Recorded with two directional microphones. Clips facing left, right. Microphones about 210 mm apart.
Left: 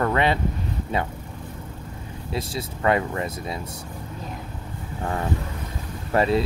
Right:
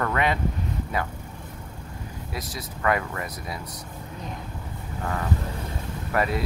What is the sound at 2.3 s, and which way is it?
Speech, 25° left (ahead or behind).